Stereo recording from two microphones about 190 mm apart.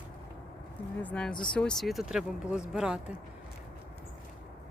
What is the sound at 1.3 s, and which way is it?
Speech, 25° left (ahead or behind).